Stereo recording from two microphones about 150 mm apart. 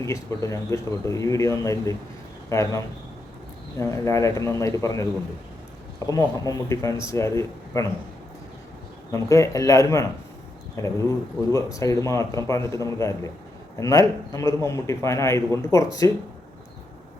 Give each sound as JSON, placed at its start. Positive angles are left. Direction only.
{"t": 0.0, "sound": "a man's voice", "side_deg": 20}
{"t": 9.1, "sound": "a man's voice", "side_deg": 20}